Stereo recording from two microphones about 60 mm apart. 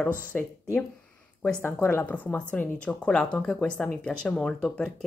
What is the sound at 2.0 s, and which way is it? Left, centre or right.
Speech, left.